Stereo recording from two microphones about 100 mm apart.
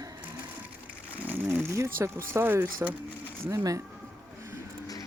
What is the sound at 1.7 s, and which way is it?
Speech, 30° right (ahead or behind).